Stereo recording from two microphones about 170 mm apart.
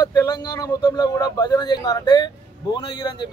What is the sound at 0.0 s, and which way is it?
Speech, 20° left (ahead or behind).